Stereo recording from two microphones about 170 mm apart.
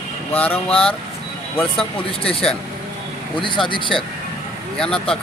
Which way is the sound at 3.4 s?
30° left (ahead or behind).